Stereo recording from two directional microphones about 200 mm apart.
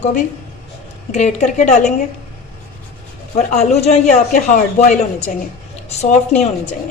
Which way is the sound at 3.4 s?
35° left (ahead or behind).